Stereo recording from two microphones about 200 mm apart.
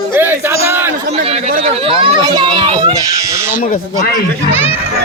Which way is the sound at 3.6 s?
45° left (ahead or behind).